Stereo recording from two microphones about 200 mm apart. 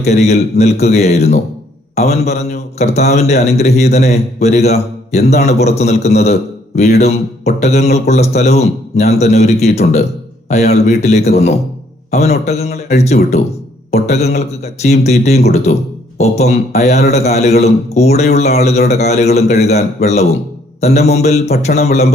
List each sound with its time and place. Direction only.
0.0 s a man's voice: 35° left (ahead or behind)